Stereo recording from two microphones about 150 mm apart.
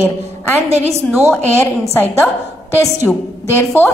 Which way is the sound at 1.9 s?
15° left (ahead or behind).